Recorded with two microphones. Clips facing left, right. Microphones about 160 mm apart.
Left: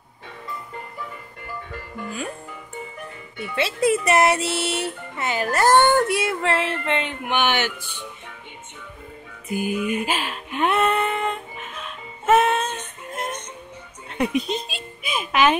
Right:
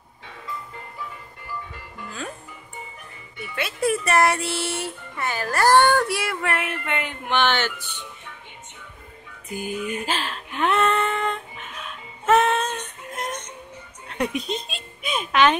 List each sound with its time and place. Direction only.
3.5 s speech: 25° left (ahead or behind)
7.2 s speech: 10° left (ahead or behind)
9.5 s a sound: 10° left (ahead or behind)